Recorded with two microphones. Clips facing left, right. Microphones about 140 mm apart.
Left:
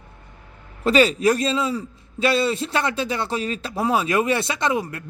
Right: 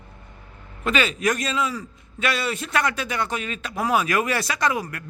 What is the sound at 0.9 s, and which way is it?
A man's voice, 35° left (ahead or behind).